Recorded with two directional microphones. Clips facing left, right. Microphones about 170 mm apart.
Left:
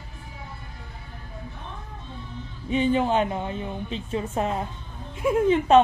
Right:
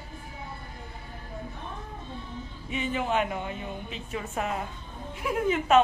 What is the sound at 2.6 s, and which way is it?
A woman's voice, 30° left (ahead or behind).